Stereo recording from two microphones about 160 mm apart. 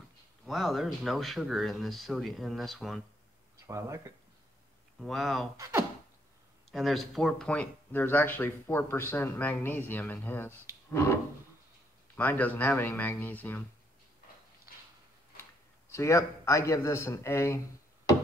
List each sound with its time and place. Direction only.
0.5 s speech: centre (ahead or behind)
3.6 s speech: 20° right (ahead or behind)
5.0 s speech: centre (ahead or behind)
5.6 s speech: 20° right (ahead or behind)
6.7 s speech: centre (ahead or behind)
12.2 s speech: 10° left (ahead or behind)
15.9 s speech: 20° left (ahead or behind)